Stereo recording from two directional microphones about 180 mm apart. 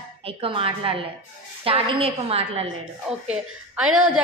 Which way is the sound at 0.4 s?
30° right (ahead or behind).